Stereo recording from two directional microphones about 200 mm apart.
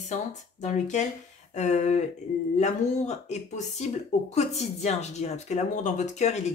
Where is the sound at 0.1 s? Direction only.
35° left (ahead or behind).